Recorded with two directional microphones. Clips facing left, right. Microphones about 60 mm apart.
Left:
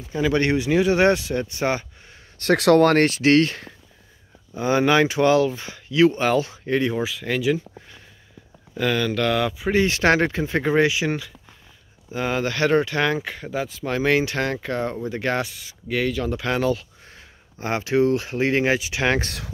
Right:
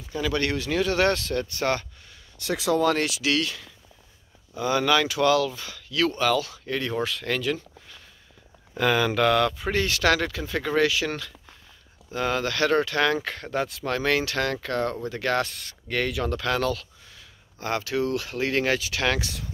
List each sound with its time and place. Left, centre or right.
0.1 s speech: left
2.3 s speech: left
4.6 s speech: left
6.9 s speech: centre
8.7 s speech: centre
9.4 s speech: centre
9.8 s speech: left; by 13.8 s centre
13.8 s speech: centre
15.4 s speech: centre
16.3 s speech: centre